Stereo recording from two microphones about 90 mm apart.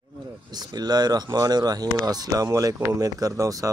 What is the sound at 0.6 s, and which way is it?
Speech, 50° right (ahead or behind).